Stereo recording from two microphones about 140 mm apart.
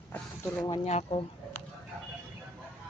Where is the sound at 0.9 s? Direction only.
50° left (ahead or behind).